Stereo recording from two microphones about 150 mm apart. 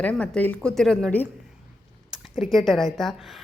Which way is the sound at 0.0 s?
10° left (ahead or behind).